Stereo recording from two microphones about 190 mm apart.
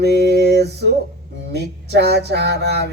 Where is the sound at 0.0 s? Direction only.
60° right (ahead or behind).